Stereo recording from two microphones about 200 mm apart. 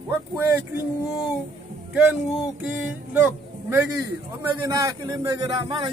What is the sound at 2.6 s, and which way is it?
Music, 5° right (ahead or behind).